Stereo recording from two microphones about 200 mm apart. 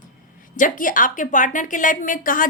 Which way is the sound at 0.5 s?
40° left (ahead or behind).